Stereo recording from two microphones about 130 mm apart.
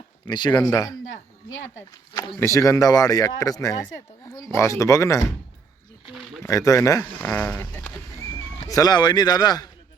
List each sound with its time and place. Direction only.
0.3 s speech: 35° left (ahead or behind)
2.4 s speech: 25° left (ahead or behind)
6.4 s speech: 25° left (ahead or behind)
7.2 s speech: 10° left (ahead or behind)
8.6 s speech: 30° left (ahead or behind)